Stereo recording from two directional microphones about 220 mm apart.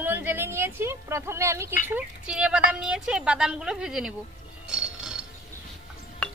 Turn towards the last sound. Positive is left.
turn(degrees=5)  # may be behind; listen again after turning